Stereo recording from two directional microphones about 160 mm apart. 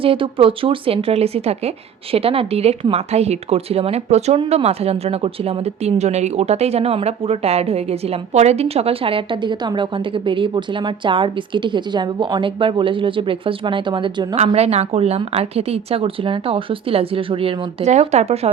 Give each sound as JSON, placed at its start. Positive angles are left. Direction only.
{"t": 0.0, "sound": "speech", "side_deg": -35}
{"t": 14.3, "sound": "speech", "side_deg": -40}